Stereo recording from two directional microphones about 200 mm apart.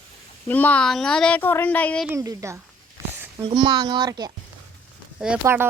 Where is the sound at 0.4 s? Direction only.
10° left (ahead or behind).